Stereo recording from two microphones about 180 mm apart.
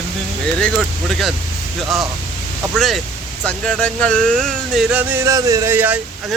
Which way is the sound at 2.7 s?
Centre (ahead or behind).